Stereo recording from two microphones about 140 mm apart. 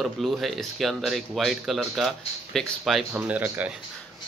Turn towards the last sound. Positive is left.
turn(degrees=-10)  # may be behind; listen again after turning